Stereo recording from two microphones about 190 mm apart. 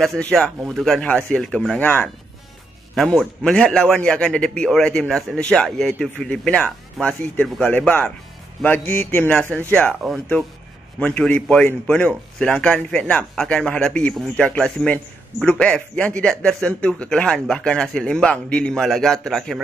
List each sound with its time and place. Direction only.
0.0 s speech: centre (ahead or behind)